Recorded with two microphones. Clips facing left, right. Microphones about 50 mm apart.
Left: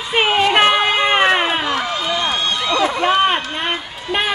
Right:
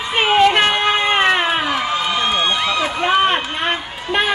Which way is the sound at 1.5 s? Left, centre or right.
Centre.